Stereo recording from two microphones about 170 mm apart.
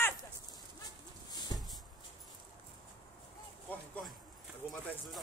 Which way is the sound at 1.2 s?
25° left (ahead or behind).